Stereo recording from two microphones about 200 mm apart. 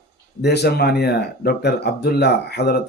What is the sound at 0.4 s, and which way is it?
Speech, 55° left (ahead or behind).